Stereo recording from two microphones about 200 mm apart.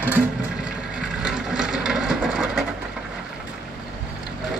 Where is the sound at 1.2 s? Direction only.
5° right (ahead or behind).